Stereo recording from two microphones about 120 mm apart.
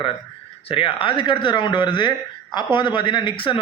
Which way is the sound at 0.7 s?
50° left (ahead or behind).